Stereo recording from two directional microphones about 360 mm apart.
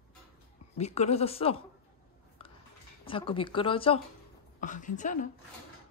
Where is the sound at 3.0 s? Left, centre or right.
Centre.